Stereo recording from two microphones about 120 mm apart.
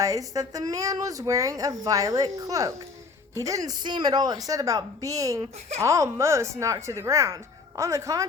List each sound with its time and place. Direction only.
0.0 s speech: 30° right (ahead or behind)